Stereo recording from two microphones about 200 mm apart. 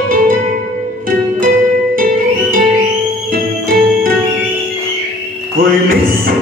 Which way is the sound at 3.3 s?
45° right (ahead or behind).